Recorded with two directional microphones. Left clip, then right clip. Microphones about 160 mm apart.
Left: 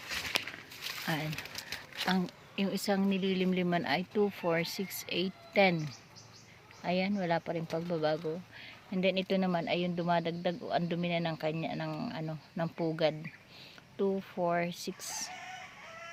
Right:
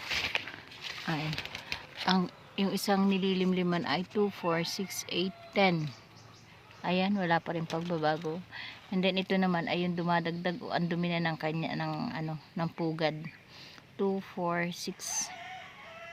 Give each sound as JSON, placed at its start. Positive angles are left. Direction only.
{"t": 0.8, "sound": "a sound", "side_deg": 80}
{"t": 1.0, "sound": "speech", "side_deg": 10}
{"t": 6.8, "sound": "speech", "side_deg": 5}